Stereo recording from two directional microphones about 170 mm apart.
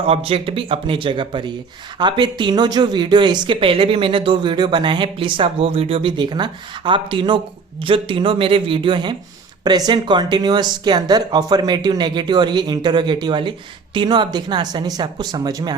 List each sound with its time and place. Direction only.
0.1 s speech: 35° right (ahead or behind)